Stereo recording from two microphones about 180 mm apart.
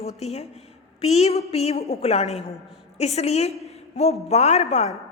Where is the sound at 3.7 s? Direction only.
35° left (ahead or behind).